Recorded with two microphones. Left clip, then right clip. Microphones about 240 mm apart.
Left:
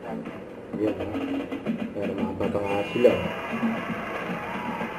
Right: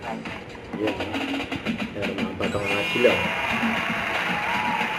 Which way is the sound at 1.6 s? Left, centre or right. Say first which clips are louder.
Right 2 dB; centre.